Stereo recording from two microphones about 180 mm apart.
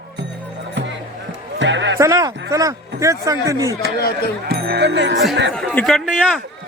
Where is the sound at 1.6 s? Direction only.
90° right.